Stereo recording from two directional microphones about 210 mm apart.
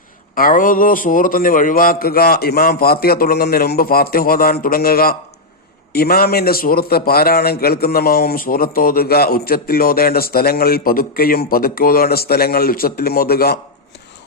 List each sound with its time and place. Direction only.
0.3 s a man's voice: 40° left (ahead or behind)